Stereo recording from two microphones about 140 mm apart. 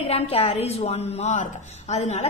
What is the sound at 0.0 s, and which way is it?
A woman's voice, 45° left (ahead or behind).